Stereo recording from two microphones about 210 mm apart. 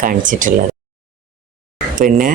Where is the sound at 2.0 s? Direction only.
40° right (ahead or behind).